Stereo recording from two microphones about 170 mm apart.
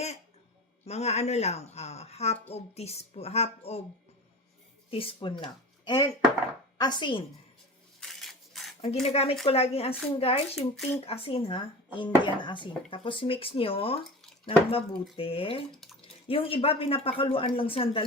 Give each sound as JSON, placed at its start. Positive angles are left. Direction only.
{"t": 0.9, "sound": "speech", "side_deg": 40}
{"t": 4.9, "sound": "speech", "side_deg": 35}
{"t": 8.0, "sound": "a sound", "side_deg": 0}
{"t": 9.0, "sound": "speech", "side_deg": 35}
{"t": 15.8, "sound": "drip", "side_deg": 0}
{"t": 16.2, "sound": "speech", "side_deg": 35}